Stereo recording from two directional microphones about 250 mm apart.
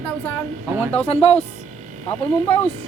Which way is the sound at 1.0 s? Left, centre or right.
Left.